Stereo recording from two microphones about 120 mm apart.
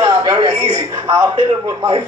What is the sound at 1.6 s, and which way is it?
Speech, 30° right (ahead or behind).